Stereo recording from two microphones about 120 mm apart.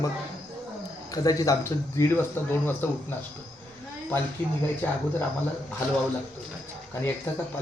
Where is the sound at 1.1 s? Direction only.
30° left (ahead or behind).